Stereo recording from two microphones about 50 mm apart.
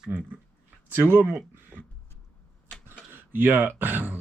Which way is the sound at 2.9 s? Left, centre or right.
Right.